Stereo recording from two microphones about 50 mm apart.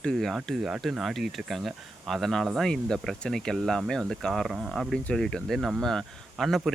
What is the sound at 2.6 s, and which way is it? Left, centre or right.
Speech, centre.